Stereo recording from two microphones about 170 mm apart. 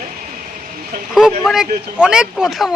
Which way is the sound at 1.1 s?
Centre (ahead or behind).